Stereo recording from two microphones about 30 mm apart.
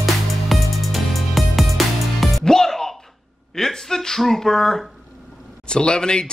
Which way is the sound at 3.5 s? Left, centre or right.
Centre.